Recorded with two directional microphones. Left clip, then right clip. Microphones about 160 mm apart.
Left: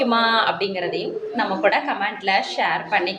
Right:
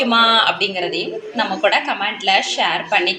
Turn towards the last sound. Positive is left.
turn(degrees=-5)  # may be behind; listen again after turning